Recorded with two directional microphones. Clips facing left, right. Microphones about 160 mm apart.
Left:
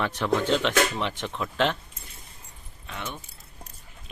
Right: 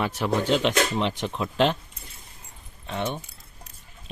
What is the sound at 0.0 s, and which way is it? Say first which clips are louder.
Speech: right 1 dB; 10° right (ahead or behind).